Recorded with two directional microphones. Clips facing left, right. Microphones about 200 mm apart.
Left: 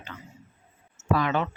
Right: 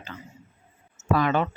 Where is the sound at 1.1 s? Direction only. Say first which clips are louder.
Right 2 dB; 45° right (ahead or behind).